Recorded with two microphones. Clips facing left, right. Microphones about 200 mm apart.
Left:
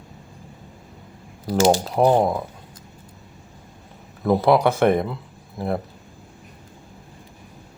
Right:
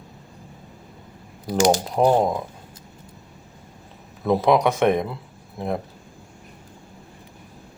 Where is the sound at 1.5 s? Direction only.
15° right (ahead or behind).